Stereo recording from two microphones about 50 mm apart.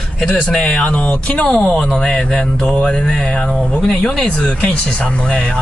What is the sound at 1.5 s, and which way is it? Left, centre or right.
Speech, centre.